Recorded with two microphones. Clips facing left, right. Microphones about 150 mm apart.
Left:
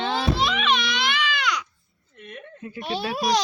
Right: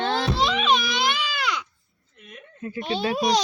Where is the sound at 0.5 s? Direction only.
35° right (ahead or behind).